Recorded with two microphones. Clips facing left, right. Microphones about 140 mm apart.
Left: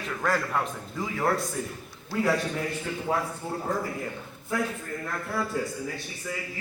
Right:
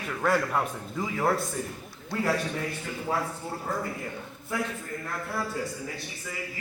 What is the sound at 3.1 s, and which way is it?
Speech, 20° left (ahead or behind).